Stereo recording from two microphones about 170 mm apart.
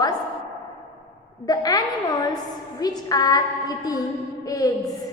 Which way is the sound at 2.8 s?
20° left (ahead or behind).